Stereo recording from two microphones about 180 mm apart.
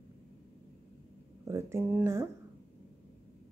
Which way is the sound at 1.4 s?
15° right (ahead or behind).